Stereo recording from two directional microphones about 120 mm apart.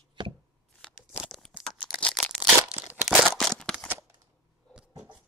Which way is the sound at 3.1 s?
Centre (ahead or behind).